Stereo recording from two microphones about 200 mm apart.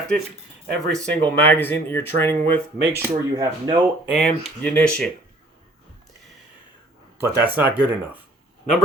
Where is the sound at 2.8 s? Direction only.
10° right (ahead or behind).